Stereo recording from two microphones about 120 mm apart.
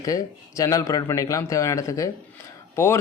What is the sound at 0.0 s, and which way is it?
Speech, 30° left (ahead or behind).